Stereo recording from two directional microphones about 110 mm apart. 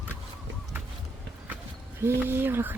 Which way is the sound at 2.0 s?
20° right (ahead or behind).